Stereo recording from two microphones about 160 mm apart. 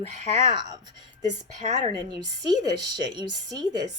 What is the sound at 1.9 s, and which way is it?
A woman's voice, 25° right (ahead or behind).